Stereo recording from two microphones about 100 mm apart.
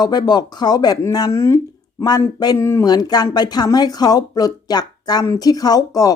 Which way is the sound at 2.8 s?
45° left (ahead or behind).